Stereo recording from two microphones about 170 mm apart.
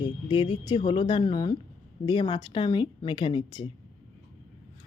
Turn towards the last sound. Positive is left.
turn(degrees=30)  # may be behind; listen again after turning